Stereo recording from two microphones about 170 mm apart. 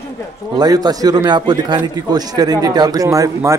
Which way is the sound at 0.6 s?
20° right (ahead or behind).